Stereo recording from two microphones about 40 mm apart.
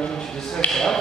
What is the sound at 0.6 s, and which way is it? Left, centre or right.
Speech, left.